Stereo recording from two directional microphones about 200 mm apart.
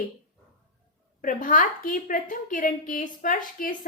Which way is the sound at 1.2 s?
40° left (ahead or behind).